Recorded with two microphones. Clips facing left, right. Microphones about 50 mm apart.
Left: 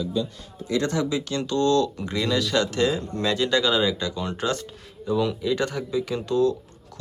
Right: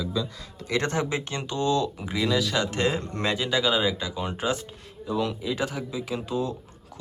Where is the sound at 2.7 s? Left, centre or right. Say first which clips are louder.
Left 3 dB; right.